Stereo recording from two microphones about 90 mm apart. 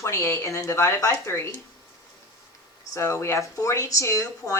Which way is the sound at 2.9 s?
30° left (ahead or behind).